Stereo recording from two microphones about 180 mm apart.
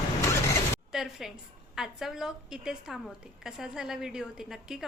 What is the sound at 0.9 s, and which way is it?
A woman's voice, centre (ahead or behind).